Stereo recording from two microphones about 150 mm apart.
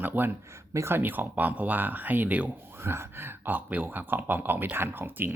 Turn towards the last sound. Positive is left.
turn(degrees=-15)  # may be behind; listen again after turning